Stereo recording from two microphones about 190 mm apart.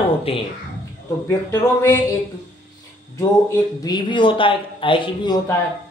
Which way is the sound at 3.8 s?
25° left (ahead or behind).